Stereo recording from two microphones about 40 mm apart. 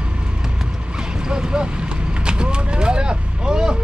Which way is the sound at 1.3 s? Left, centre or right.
Centre.